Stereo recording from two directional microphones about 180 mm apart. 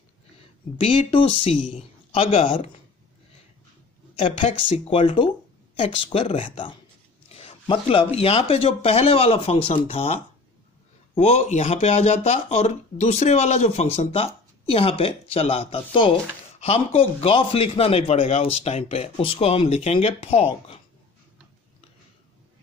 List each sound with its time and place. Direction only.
0.7 s speech: 30° left (ahead or behind)
4.6 s speech: 30° left (ahead or behind)